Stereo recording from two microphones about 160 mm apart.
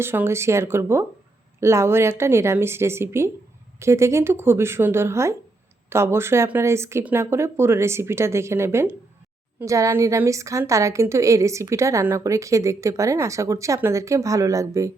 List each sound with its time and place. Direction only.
0.0 s a woman's voice: 15° right (ahead or behind)